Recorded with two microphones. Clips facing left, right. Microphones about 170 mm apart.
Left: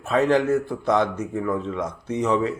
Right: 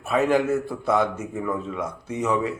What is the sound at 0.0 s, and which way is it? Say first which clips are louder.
A man's voice: left 1 dB; 10° right (ahead or behind).